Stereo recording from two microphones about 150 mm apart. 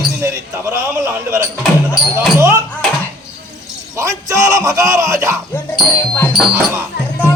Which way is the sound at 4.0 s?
20° right (ahead or behind).